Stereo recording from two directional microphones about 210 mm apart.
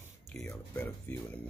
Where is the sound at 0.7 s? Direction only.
10° left (ahead or behind).